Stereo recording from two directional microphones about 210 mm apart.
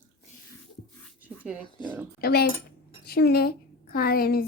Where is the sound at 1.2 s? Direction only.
5° right (ahead or behind).